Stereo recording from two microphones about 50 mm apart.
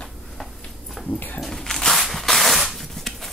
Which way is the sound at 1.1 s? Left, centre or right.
Left.